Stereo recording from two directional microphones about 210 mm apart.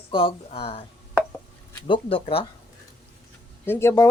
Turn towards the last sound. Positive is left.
turn(degrees=10)  # may be behind; listen again after turning